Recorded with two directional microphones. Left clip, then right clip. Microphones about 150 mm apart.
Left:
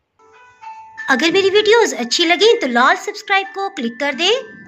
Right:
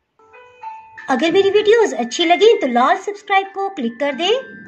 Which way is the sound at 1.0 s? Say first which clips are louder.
Left 1 dB; 20° right (ahead or behind).